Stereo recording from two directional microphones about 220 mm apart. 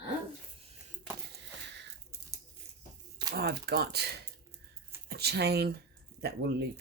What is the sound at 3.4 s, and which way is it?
Speech, 45° right (ahead or behind).